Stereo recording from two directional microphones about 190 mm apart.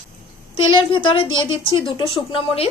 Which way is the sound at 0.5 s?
25° left (ahead or behind).